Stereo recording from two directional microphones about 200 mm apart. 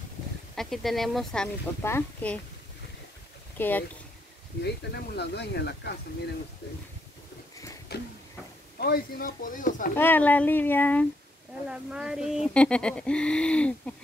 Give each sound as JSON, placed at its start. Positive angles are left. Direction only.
{"t": 0.6, "sound": "speech", "side_deg": 0}
{"t": 3.5, "sound": "speech", "side_deg": 10}
{"t": 4.6, "sound": "speech", "side_deg": 55}
{"t": 7.9, "sound": "a sound", "side_deg": 55}
{"t": 8.7, "sound": "speech", "side_deg": 50}
{"t": 9.9, "sound": "speech", "side_deg": 10}
{"t": 11.7, "sound": "speech", "side_deg": -5}